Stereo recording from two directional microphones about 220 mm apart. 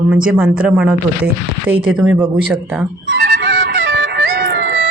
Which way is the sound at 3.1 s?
55° right (ahead or behind).